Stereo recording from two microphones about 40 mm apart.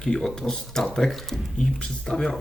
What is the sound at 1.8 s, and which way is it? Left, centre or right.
Speech, left.